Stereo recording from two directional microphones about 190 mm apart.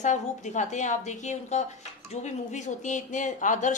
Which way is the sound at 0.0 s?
40° left (ahead or behind).